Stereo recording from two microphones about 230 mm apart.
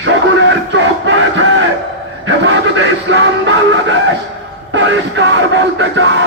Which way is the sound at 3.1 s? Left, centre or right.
Right.